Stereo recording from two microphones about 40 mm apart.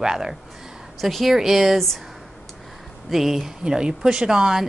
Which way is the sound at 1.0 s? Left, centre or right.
Centre.